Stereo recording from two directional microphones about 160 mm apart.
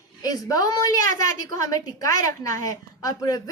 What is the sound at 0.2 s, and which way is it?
A woman's voice, 25° left (ahead or behind).